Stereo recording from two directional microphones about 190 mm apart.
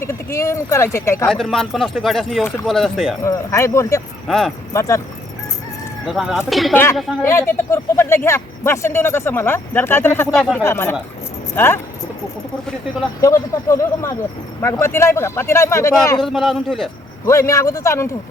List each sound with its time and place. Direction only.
0.0 s speech: 15° left (ahead or behind)
1.3 s speech: centre (ahead or behind)
3.2 s speech: 15° left (ahead or behind)
4.3 s speech: centre (ahead or behind)
4.7 s speech: 15° left (ahead or behind)
6.1 s speech: centre (ahead or behind)
7.2 s speech: 15° left (ahead or behind)
13.2 s speech: 15° left (ahead or behind)
16.2 s speech: centre (ahead or behind)
17.2 s speech: 15° left (ahead or behind)